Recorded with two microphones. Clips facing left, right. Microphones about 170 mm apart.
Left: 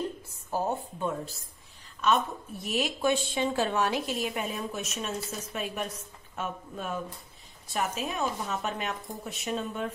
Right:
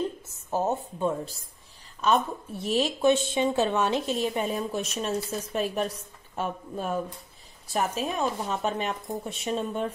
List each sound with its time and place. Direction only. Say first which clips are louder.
0.5 s a woman's voice: right 3 dB; 20° right (ahead or behind)
2.5 s a woman's voice: right 5 dB; 30° right (ahead or behind)